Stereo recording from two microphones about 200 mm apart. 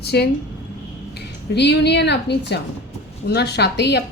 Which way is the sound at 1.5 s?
55° left (ahead or behind).